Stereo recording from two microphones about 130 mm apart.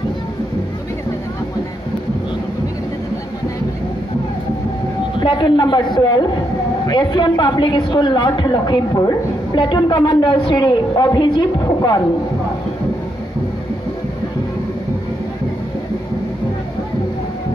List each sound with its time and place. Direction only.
5.1 s a woman's voice: 40° left (ahead or behind)